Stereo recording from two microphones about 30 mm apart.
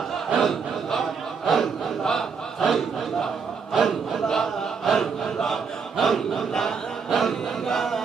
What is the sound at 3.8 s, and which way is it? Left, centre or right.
Chant, centre.